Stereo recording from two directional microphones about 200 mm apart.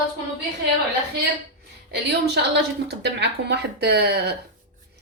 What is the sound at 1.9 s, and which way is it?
Speech, 55° right (ahead or behind).